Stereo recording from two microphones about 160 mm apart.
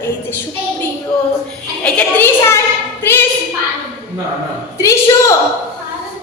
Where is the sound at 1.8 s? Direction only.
10° left (ahead or behind).